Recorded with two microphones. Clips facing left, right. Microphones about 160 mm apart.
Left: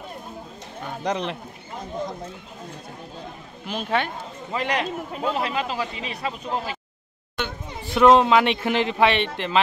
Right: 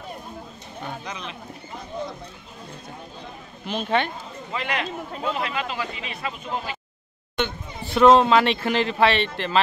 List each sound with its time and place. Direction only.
1.0 s speech: 70° left (ahead or behind)
3.6 s speech: 10° left (ahead or behind)
4.6 s speech: 35° left (ahead or behind)
5.1 s speech: 5° left (ahead or behind)
5.7 s speech: 35° left (ahead or behind)
7.3 s speech: 10° left (ahead or behind)